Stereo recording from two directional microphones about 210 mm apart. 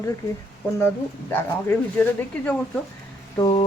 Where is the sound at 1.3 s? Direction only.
10° left (ahead or behind).